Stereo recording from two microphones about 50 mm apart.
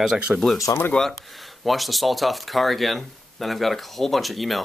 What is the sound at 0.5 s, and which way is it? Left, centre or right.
Speech, left.